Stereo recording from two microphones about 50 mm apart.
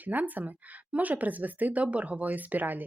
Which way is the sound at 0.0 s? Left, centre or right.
Right.